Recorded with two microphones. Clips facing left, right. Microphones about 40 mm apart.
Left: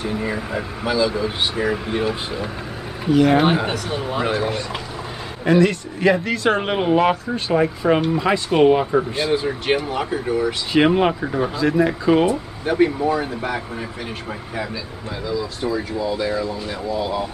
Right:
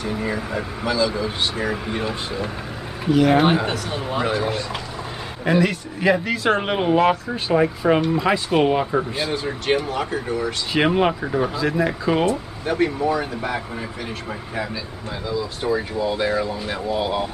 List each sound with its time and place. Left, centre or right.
0.0 s speech: centre
15.7 s speech: right
16.9 s speech: right